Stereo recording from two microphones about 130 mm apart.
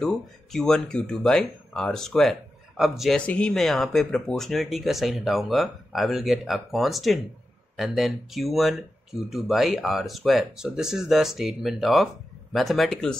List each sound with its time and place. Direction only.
0.0 s speech: 5° left (ahead or behind)